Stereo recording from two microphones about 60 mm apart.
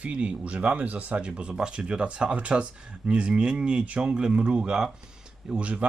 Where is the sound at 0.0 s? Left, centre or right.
Centre.